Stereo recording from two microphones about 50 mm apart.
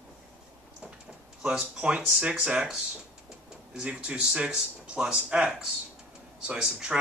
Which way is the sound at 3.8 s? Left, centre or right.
Right.